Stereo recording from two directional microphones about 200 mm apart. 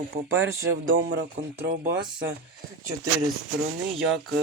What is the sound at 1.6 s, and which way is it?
Speech, 45° right (ahead or behind).